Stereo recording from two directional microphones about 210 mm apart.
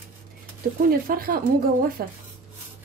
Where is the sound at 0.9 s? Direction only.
45° right (ahead or behind).